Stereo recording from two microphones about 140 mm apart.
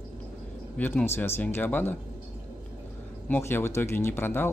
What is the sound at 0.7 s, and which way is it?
Speech, 15° left (ahead or behind).